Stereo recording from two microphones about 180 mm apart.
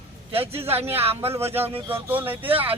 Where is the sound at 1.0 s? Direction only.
35° right (ahead or behind).